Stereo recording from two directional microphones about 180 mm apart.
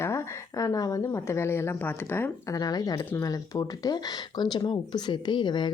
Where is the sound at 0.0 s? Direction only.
15° left (ahead or behind).